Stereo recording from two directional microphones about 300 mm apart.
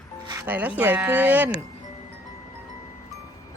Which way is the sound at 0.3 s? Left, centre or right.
Centre.